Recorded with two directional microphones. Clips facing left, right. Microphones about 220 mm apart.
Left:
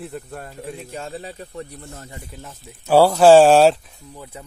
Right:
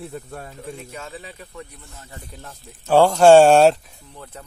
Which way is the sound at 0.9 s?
35° left (ahead or behind).